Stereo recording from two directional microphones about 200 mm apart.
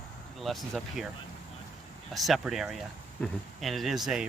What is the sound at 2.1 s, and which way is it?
Speech, centre (ahead or behind).